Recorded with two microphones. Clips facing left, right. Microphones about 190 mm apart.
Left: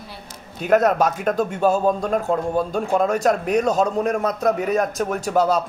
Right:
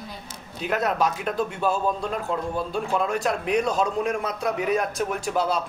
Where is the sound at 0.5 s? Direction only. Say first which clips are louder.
Left 7 dB; 45° left (ahead or behind).